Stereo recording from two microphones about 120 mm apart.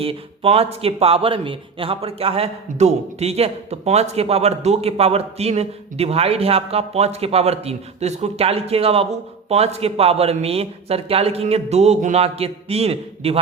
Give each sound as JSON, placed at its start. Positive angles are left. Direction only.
{"t": 0.0, "sound": "a man's voice", "side_deg": -55}